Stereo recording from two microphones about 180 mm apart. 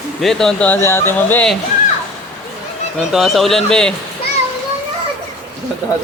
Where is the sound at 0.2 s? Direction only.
Centre (ahead or behind).